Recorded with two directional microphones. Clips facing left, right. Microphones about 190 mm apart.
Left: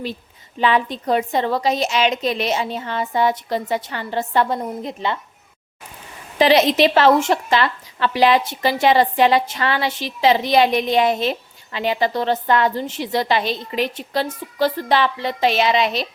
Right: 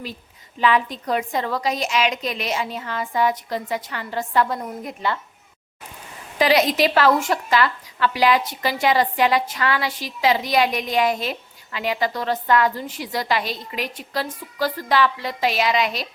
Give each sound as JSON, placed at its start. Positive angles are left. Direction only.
{"t": 0.6, "sound": "a woman's voice", "side_deg": 30}
{"t": 6.4, "sound": "a woman's voice", "side_deg": 25}